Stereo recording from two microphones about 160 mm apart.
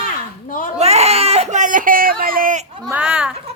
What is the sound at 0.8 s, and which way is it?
Speech, 40° right (ahead or behind).